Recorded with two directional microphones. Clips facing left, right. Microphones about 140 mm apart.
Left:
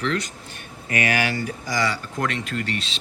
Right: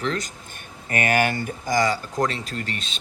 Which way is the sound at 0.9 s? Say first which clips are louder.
Right 2 dB; 50° right (ahead or behind).